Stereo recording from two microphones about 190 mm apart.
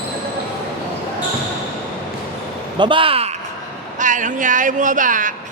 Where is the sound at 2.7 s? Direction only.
25° right (ahead or behind).